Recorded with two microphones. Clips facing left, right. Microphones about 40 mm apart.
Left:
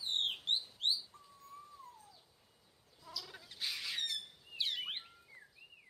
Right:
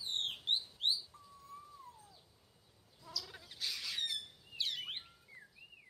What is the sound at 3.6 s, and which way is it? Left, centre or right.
Squawk, centre.